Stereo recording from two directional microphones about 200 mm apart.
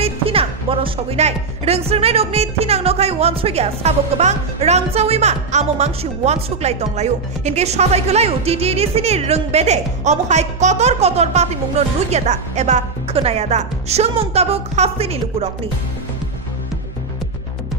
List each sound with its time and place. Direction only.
0.0 s speech: 30° right (ahead or behind)